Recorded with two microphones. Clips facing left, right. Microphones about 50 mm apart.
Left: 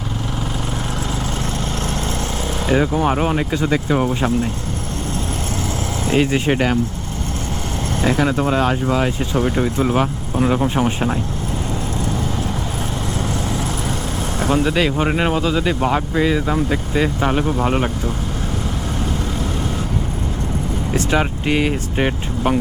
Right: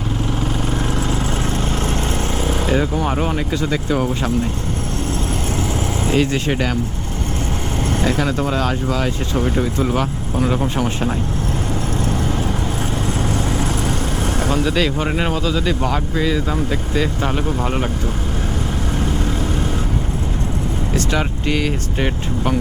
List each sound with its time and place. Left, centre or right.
2.6 s speech: centre
6.1 s speech: centre
8.0 s speech: centre
14.5 s speech: centre
20.9 s speech: centre